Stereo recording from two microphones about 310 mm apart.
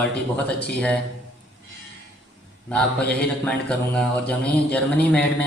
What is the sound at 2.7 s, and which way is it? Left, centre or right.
A man's voice, centre.